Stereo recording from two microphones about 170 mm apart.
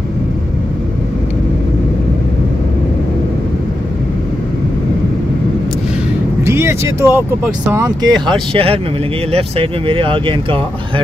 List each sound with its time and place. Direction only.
6.4 s speech: 15° right (ahead or behind); by 10.6 s 30° right (ahead or behind)